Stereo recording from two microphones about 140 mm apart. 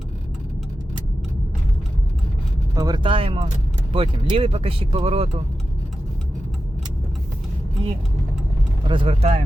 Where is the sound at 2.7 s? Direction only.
30° right (ahead or behind); by 5.3 s 45° right (ahead or behind).